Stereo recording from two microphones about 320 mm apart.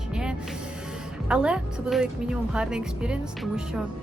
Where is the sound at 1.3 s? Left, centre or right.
Centre.